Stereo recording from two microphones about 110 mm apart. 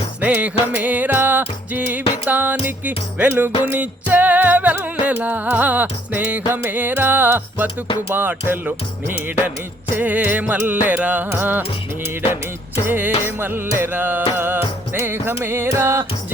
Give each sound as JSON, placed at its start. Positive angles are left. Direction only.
{"t": 0.2, "sound": "speech", "side_deg": -15}
{"t": 11.3, "sound": "music", "side_deg": -20}
{"t": 12.9, "sound": "music", "side_deg": -15}